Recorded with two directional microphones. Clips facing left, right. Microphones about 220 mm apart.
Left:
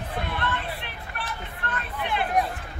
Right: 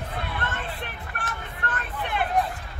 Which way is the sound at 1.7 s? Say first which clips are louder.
Left 1 dB; 50° right (ahead or behind).